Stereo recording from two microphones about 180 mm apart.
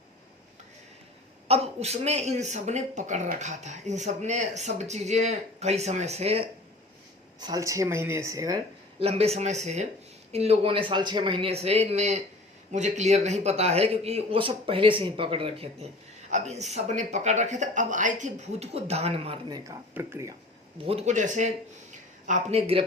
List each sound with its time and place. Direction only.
1.5 s speech: 35° right (ahead or behind)
7.3 s speech: 20° right (ahead or behind)
9.0 s speech: 35° right (ahead or behind); by 20.3 s 15° right (ahead or behind)
20.8 s speech: 35° right (ahead or behind)